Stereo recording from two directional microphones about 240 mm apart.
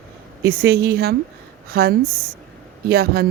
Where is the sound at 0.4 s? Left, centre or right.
Right.